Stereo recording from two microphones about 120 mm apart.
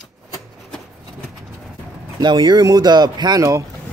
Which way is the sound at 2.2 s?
40° right (ahead or behind).